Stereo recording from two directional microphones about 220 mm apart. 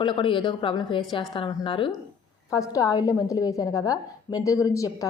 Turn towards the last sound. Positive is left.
turn(degrees=15)  # may be behind; listen again after turning